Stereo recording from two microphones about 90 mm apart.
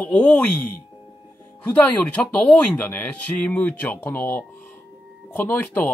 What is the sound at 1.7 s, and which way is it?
Speech, 15° left (ahead or behind).